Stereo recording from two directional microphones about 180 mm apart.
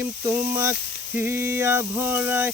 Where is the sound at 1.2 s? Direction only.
10° right (ahead or behind).